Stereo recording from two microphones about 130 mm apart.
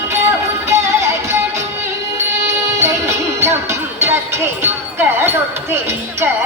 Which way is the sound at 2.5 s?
20° right (ahead or behind).